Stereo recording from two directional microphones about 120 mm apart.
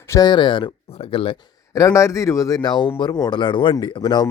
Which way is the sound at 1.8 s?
25° left (ahead or behind).